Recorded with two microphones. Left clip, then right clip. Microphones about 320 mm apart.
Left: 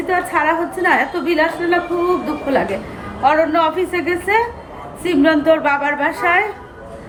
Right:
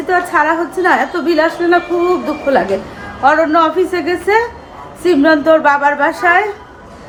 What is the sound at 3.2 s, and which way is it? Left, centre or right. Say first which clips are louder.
A woman's voice: right 4 dB; centre.